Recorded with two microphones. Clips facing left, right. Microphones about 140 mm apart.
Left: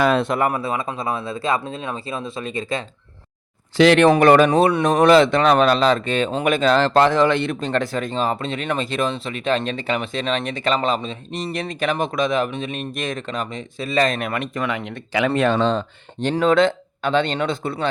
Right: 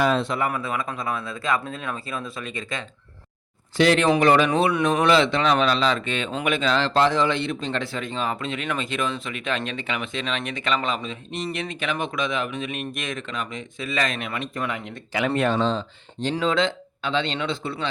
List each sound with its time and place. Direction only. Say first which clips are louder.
0.0 s speech: left 4 dB; 60° left (ahead or behind)
0.5 s speech: left 4 dB; 30° left (ahead or behind)
3.8 s speech: left 5 dB; 80° left; by 4.4 s 55° left (ahead or behind)
4.4 s speech: left 4 dB; 40° left (ahead or behind)
14.2 s speech: left 5 dB; 50° left (ahead or behind)
14.5 s speech: left 4 dB; 90° left; by 15.8 s 70° left (ahead or behind)
16.2 s speech: left 6 dB; 55° left (ahead or behind)